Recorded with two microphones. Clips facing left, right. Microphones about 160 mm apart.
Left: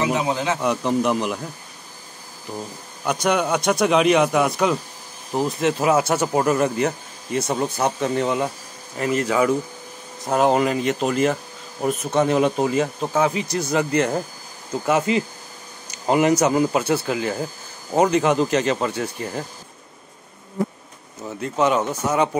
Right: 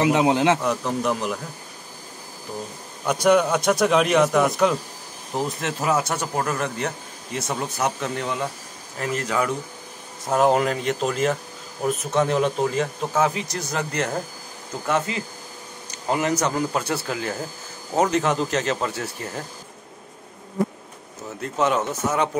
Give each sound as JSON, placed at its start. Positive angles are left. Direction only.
{"t": 0.0, "sound": "a man's voice", "side_deg": -70}
{"t": 0.6, "sound": "a man's voice", "side_deg": 0}
{"t": 3.1, "sound": "a man's voice", "side_deg": 0}
{"t": 6.1, "sound": "a man's voice", "side_deg": 20}
{"t": 8.0, "sound": "a man's voice", "side_deg": 10}
{"t": 15.1, "sound": "a man's voice", "side_deg": 20}
{"t": 21.4, "sound": "a man's voice", "side_deg": 0}